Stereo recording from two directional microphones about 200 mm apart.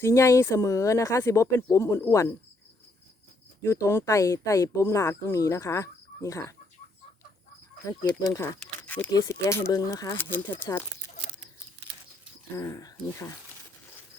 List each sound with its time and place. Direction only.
0.0 s speech: 15° left (ahead or behind)
3.6 s speech: 15° left (ahead or behind)
7.9 s speech: 15° left (ahead or behind)
12.5 s speech: 15° left (ahead or behind)